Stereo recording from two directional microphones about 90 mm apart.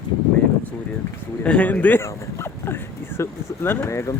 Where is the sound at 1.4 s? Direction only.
15° left (ahead or behind).